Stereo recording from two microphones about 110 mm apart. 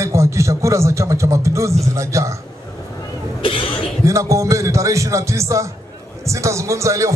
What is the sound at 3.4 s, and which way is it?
Speech, 50° left (ahead or behind).